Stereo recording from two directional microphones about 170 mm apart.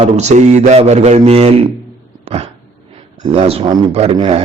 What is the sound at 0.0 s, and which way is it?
A man's voice, 40° right (ahead or behind).